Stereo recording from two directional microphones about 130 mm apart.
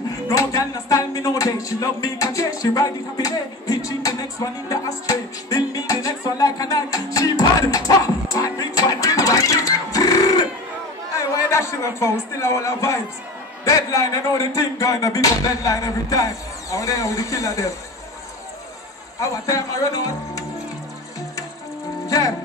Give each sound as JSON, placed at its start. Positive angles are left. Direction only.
{"t": 0.3, "sound": "speech", "side_deg": 25}
{"t": 7.2, "sound": "music", "side_deg": 25}
{"t": 11.1, "sound": "a man's voice", "side_deg": 25}
{"t": 19.1, "sound": "speech", "side_deg": 25}
{"t": 22.0, "sound": "music", "side_deg": 25}